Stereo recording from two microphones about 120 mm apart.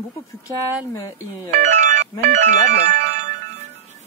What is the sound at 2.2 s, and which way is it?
Speech, 90° right.